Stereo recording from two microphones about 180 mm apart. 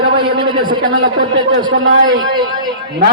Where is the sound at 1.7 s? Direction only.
90° right.